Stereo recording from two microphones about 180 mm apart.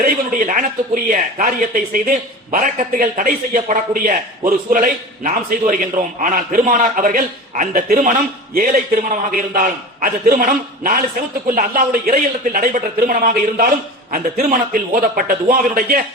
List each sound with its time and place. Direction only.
0.0 s speech: 45° right (ahead or behind)